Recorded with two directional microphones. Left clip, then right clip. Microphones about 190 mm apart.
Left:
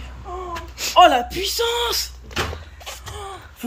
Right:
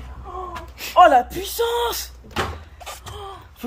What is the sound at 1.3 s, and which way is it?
Speech, 40° right (ahead or behind).